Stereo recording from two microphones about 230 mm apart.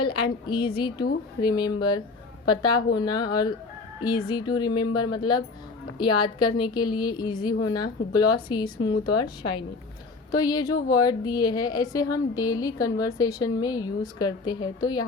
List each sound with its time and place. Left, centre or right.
0.0 s a woman's voice: left